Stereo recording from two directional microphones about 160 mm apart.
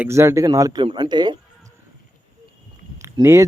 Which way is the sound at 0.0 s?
20° right (ahead or behind).